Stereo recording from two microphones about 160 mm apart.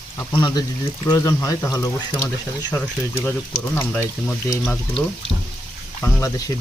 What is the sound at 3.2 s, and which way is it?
Speech, 15° left (ahead or behind).